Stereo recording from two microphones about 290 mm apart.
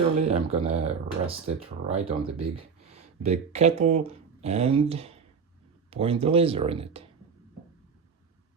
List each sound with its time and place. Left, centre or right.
0.2 s speech: right